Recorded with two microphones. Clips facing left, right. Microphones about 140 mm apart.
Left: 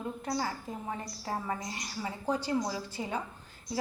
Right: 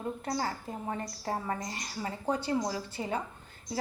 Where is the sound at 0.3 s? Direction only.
40° right (ahead or behind).